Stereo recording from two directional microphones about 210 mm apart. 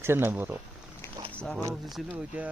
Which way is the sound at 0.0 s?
10° right (ahead or behind).